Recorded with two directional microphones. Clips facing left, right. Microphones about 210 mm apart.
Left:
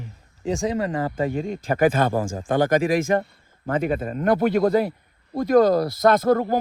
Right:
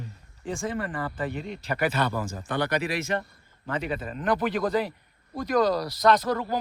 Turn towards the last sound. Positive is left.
turn(degrees=50)  # may be behind; listen again after turning